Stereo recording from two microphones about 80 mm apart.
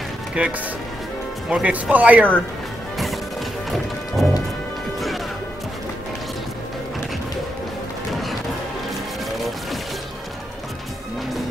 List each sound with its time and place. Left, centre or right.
0.4 s speech: centre
4.2 s music: centre
8.1 s music: centre